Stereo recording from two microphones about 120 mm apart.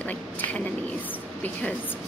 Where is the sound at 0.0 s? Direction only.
10° left (ahead or behind).